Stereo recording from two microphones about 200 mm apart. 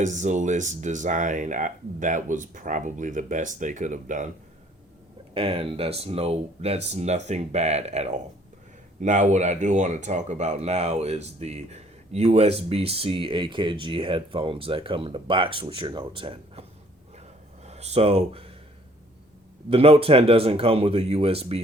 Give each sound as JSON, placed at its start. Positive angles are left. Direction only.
{"t": 0.0, "sound": "speech", "side_deg": -35}
{"t": 5.3, "sound": "speech", "side_deg": -30}
{"t": 17.7, "sound": "speech", "side_deg": -30}
{"t": 19.7, "sound": "speech", "side_deg": -30}